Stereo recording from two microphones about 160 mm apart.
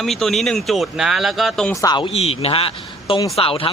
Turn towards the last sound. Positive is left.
turn(degrees=35)  # may be behind; listen again after turning